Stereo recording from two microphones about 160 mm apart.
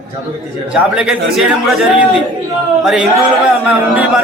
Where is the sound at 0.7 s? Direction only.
5° right (ahead or behind).